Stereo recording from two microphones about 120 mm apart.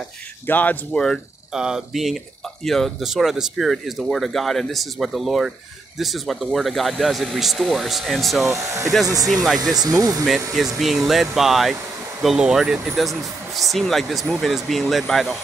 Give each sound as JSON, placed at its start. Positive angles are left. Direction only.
{"t": 0.5, "sound": "speech", "side_deg": 15}
{"t": 8.5, "sound": "speech", "side_deg": -25}
{"t": 9.3, "sound": "speech", "side_deg": 0}
{"t": 9.8, "sound": "speech", "side_deg": -30}
{"t": 10.8, "sound": "speech", "side_deg": 0}